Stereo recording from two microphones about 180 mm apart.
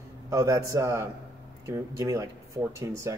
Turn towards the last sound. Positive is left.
turn(degrees=-15)  # may be behind; listen again after turning